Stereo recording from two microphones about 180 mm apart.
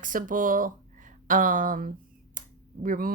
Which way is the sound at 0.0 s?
50° right (ahead or behind).